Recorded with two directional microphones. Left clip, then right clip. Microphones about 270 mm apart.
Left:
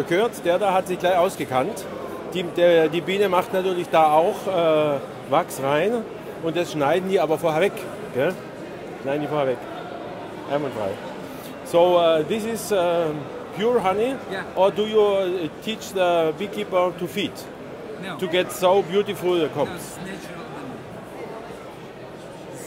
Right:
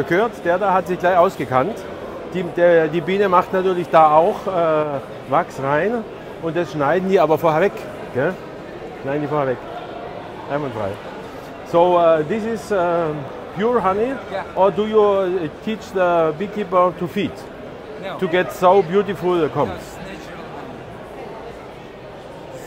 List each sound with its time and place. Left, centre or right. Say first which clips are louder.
0.1 s speech: right 2 dB; centre
7.1 s a man's voice: right 5 dB; centre
11.7 s speech: right 3 dB; centre